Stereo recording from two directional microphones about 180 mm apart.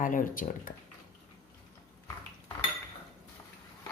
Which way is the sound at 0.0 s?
50° left (ahead or behind).